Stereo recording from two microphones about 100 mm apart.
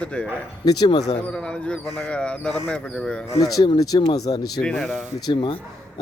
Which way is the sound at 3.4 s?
40° left (ahead or behind).